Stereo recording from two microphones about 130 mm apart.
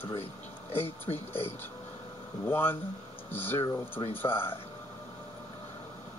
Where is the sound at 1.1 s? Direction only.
15° left (ahead or behind).